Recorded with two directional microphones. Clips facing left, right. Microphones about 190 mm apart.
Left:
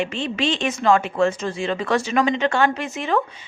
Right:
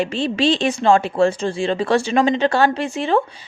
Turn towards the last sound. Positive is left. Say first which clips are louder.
# right 4 dB
turn(degrees=-30)  # may be behind; listen again after turning